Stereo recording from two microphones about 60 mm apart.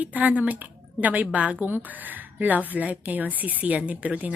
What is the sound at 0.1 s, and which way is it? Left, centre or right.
A woman's voice, right.